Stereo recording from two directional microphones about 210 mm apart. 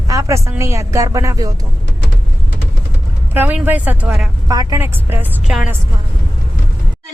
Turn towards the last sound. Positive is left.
turn(degrees=-5)  # may be behind; listen again after turning